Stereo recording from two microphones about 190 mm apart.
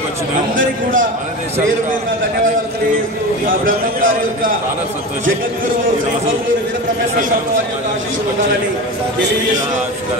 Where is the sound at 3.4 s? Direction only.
45° right (ahead or behind).